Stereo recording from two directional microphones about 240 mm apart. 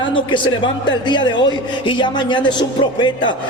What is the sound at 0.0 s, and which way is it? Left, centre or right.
A man's voice, centre.